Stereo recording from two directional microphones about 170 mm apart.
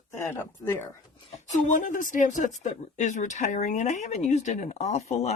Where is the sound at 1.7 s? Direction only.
50° left (ahead or behind).